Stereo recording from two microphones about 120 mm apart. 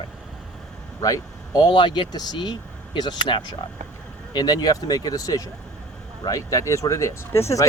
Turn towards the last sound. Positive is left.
turn(degrees=25)  # may be behind; listen again after turning